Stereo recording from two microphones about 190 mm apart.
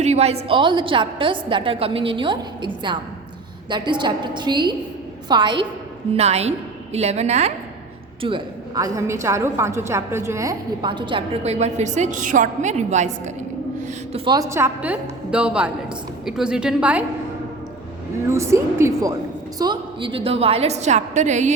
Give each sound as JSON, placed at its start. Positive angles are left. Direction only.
{"t": 0.0, "sound": "music", "side_deg": -35}
{"t": 0.4, "sound": "a woman's voice", "side_deg": -25}
{"t": 6.1, "sound": "a woman's voice", "side_deg": -35}
{"t": 8.2, "sound": "a woman's voice", "side_deg": -25}
{"t": 14.3, "sound": "a woman's voice", "side_deg": -15}
{"t": 18.3, "sound": "a woman's voice", "side_deg": -15}